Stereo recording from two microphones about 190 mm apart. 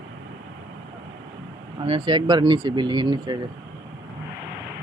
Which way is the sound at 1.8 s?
25° right (ahead or behind).